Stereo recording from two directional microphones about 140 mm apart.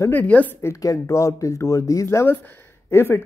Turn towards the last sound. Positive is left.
turn(degrees=20)  # may be behind; listen again after turning